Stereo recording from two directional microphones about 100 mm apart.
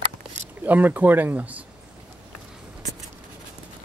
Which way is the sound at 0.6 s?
15° right (ahead or behind).